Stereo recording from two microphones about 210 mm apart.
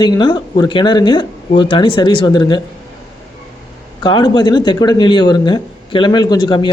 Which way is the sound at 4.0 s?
20° left (ahead or behind).